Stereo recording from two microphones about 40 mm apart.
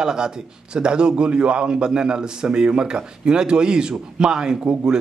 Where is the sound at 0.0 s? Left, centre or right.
Centre.